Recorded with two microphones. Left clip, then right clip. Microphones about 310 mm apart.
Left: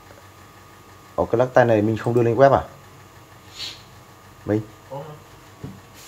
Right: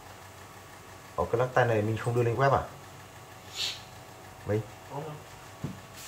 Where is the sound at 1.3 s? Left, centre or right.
Left.